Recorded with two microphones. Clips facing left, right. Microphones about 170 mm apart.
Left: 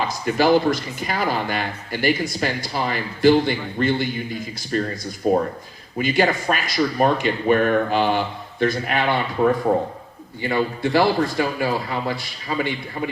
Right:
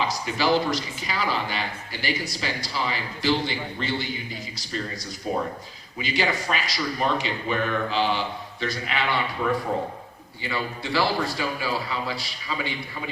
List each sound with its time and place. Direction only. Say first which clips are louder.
0.0 s speech: left 5 dB; 50° left (ahead or behind)